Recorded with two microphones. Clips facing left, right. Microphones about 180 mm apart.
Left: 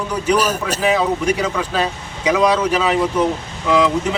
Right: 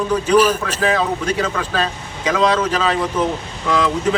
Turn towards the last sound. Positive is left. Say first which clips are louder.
# left 3 dB
turn(degrees=15)  # may be behind; listen again after turning